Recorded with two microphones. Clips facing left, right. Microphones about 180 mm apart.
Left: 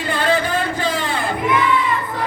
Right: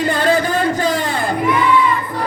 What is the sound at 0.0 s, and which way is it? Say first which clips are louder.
Music: right 3 dB; 40° right (ahead or behind).